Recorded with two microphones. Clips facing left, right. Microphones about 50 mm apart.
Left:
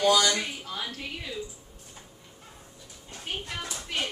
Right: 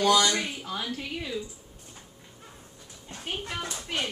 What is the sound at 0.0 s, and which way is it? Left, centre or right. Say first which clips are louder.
Speech: even; right.